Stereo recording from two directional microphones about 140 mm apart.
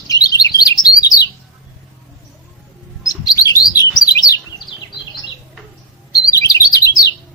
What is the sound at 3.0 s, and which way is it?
Chirp, 25° left (ahead or behind).